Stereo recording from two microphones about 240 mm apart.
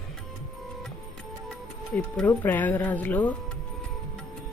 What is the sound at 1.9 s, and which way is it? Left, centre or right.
Speech, centre.